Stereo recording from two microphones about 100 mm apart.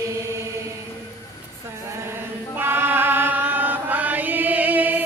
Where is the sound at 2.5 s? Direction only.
20° right (ahead or behind).